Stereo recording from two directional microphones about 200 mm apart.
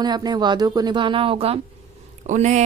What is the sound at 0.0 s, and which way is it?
Speech, 20° right (ahead or behind).